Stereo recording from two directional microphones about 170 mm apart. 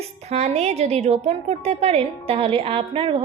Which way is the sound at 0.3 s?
40° right (ahead or behind).